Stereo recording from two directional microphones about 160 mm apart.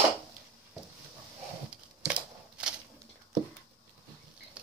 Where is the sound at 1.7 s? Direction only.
5° right (ahead or behind).